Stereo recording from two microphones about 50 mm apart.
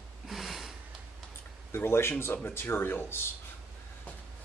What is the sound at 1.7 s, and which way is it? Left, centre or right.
Speech, left.